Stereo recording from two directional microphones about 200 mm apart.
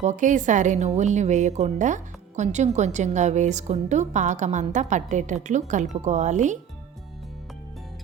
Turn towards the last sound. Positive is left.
turn(degrees=-35)  # may be behind; listen again after turning